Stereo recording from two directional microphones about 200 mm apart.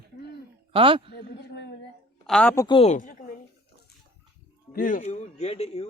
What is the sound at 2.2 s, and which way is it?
Speech, 5° left (ahead or behind).